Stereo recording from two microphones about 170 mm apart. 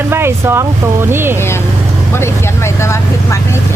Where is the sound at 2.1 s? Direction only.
15° left (ahead or behind).